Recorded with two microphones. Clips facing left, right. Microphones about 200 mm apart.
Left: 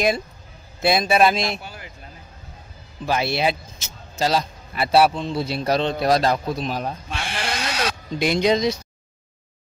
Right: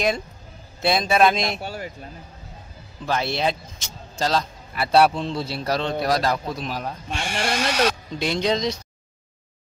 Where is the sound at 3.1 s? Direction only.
10° left (ahead or behind).